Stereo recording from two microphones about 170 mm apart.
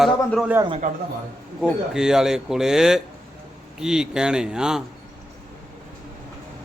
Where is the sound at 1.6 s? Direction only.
5° right (ahead or behind).